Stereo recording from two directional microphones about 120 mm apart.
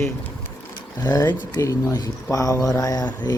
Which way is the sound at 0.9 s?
30° left (ahead or behind).